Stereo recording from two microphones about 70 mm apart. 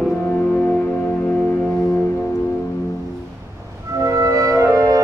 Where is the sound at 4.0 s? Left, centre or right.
Right.